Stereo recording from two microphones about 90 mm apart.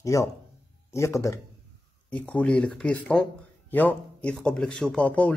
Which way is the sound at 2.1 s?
15° left (ahead or behind).